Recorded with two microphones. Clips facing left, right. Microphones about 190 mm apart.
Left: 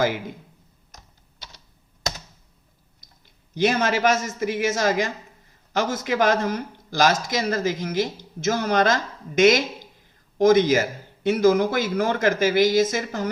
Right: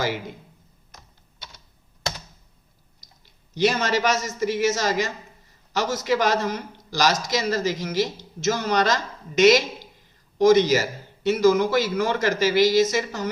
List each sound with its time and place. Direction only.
3.0 s speech: 50° left (ahead or behind)